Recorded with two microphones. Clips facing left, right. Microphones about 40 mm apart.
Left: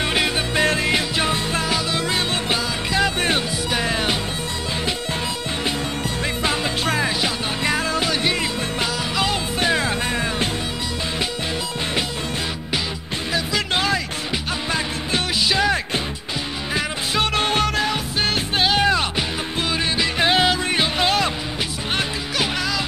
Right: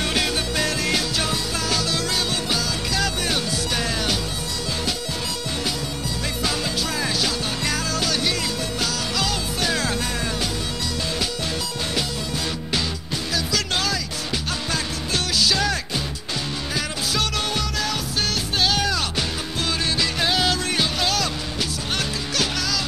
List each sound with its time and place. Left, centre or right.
0.0 s music: left
6.4 s music: left
13.3 s music: left